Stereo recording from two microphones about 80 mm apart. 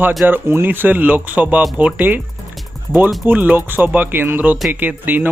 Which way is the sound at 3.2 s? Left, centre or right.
Right.